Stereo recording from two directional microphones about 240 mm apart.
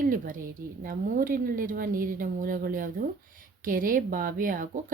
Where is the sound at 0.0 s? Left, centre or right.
Right.